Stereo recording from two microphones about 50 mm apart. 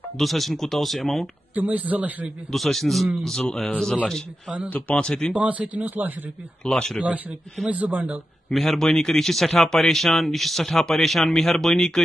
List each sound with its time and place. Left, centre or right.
0.2 s a man's voice: centre
1.5 s speech: right
2.5 s a man's voice: centre
4.6 s speech: left
5.4 s speech: right
6.6 s speech: centre
7.7 s speech: right
8.5 s a man's voice: centre